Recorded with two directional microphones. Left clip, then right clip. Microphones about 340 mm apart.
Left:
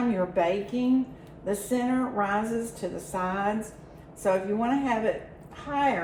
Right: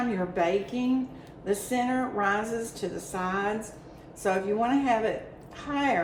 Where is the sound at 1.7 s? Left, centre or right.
Centre.